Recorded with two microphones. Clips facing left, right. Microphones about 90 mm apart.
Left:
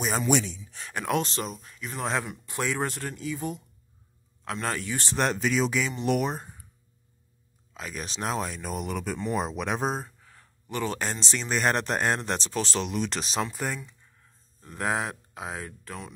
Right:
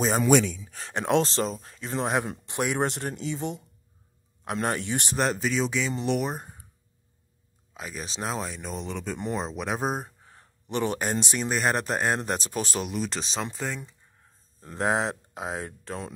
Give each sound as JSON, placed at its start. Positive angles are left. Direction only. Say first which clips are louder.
{"t": 0.2, "sound": "speech", "louder": "right 5 dB", "side_deg": -55}
{"t": 0.8, "sound": "speech", "louder": "right 4 dB", "side_deg": -30}
{"t": 5.1, "sound": "speech", "louder": "left 1 dB", "side_deg": 0}
{"t": 7.7, "sound": "speech", "louder": "even", "side_deg": -5}
{"t": 10.0, "sound": "a sound", "louder": "right 1 dB", "side_deg": -30}
{"t": 11.0, "sound": "speech", "louder": "right 3 dB", "side_deg": -15}
{"t": 11.4, "sound": "speech", "louder": "left 2 dB", "side_deg": -5}
{"t": 12.9, "sound": "speech", "louder": "left 1 dB", "side_deg": 0}
{"t": 14.6, "sound": "speech", "louder": "right 3 dB", "side_deg": -30}